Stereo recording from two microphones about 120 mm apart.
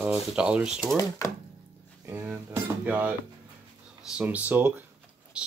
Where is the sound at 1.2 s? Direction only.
25° left (ahead or behind).